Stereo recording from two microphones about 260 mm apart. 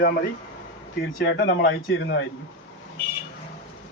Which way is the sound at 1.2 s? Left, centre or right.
Left.